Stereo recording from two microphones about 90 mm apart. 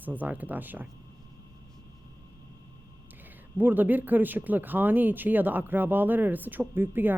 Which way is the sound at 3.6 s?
20° right (ahead or behind).